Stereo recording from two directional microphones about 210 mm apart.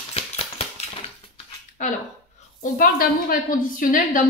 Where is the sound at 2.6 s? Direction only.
45° left (ahead or behind).